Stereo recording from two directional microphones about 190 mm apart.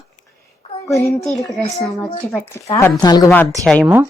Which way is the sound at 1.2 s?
Centre (ahead or behind).